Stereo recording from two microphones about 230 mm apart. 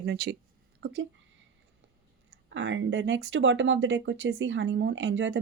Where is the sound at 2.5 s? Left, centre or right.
Right.